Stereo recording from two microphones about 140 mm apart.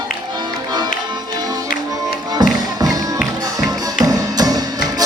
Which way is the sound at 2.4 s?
25° right (ahead or behind).